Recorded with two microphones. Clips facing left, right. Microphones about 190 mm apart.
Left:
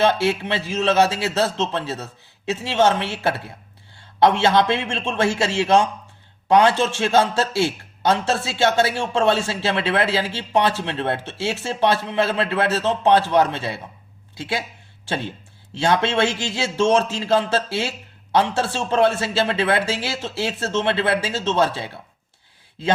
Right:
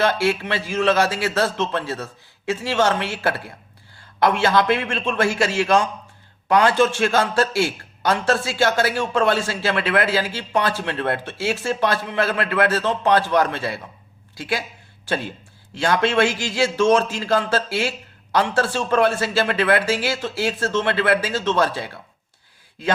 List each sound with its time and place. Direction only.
0.0 s a man's voice: 25° left (ahead or behind)